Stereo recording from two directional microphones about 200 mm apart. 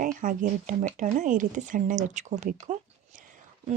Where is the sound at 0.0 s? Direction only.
40° right (ahead or behind).